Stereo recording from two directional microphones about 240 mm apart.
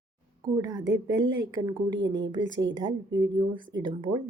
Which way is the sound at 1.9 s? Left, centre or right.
Right.